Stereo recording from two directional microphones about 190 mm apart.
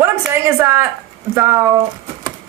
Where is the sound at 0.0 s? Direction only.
15° right (ahead or behind).